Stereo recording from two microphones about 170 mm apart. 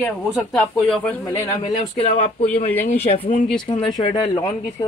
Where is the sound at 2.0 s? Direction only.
40° left (ahead or behind).